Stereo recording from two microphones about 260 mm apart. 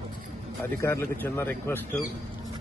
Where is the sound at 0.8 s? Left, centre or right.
Centre.